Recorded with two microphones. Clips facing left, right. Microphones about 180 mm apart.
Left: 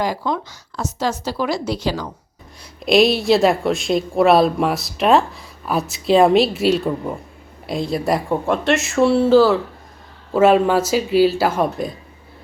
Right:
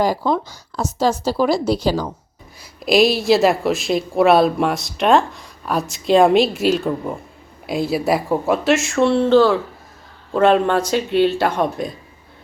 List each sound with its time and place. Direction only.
0.0 s a woman's voice: 35° right (ahead or behind)
2.8 s speech: centre (ahead or behind)